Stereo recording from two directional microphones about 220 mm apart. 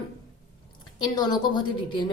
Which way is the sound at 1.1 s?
20° left (ahead or behind).